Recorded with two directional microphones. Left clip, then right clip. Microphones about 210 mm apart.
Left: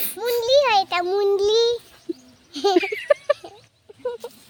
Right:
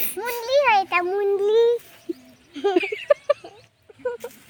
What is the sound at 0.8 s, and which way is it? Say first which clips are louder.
Speech: left 1 dB; 50° left (ahead or behind).